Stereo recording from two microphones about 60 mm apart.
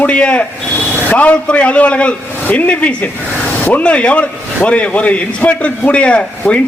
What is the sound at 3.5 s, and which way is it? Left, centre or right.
Vehicle, left.